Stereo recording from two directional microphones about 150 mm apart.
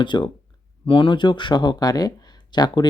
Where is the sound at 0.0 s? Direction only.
30° left (ahead or behind).